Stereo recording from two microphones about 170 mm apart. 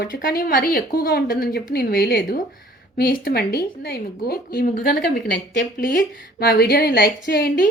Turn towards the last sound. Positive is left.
turn(degrees=65)  # may be behind; listen again after turning